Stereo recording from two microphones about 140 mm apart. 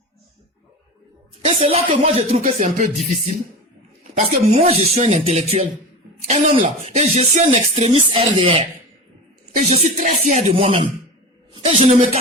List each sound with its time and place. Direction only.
1.5 s speech: 45° right (ahead or behind)
2.4 s speech: 60° right (ahead or behind)
6.9 s speech: 55° right (ahead or behind)
8.1 s speech: 35° right (ahead or behind)
9.6 s speech: 55° right (ahead or behind)
10.5 s speech: 40° right (ahead or behind)
11.6 s speech: 55° right (ahead or behind)